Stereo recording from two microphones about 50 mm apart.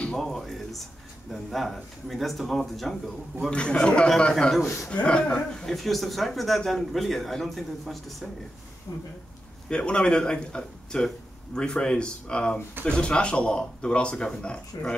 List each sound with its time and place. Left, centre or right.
0.2 s a man's voice: centre
3.4 s a man's voice: centre
5.7 s a man's voice: centre
9.7 s speech: left